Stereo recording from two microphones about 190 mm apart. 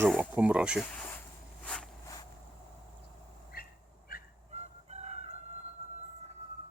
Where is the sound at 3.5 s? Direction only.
50° left (ahead or behind).